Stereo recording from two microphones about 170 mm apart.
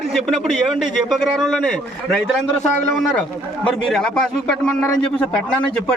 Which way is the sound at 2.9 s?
5° left (ahead or behind).